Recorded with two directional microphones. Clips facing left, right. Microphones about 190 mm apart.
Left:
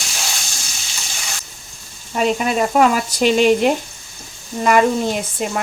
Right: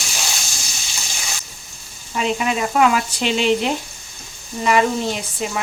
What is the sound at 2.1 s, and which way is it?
Speech, 45° left (ahead or behind).